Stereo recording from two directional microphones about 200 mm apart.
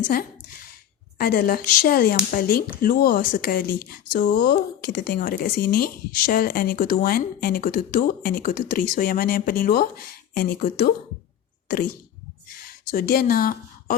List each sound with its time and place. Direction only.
1.2 s speech: 50° left (ahead or behind)
12.6 s speech: 45° left (ahead or behind)